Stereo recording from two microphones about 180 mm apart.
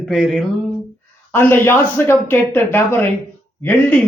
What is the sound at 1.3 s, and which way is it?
Speech, 10° left (ahead or behind).